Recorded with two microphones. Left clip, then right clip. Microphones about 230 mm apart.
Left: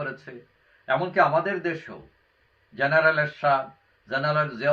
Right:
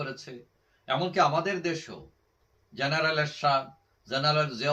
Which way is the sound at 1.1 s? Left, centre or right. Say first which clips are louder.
Left 3 dB; right.